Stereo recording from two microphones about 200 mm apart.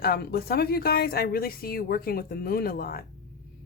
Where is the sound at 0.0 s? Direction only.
50° left (ahead or behind).